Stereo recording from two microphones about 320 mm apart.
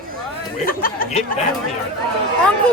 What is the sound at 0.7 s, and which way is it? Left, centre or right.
Speech, left.